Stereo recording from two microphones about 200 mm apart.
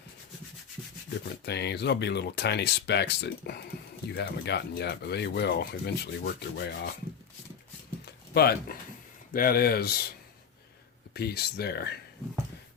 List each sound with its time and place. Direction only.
1.2 s speech: 55° left (ahead or behind)
8.0 s a sound: 55° left (ahead or behind)
9.3 s speech: 45° left (ahead or behind)
11.1 s speech: 50° left (ahead or behind)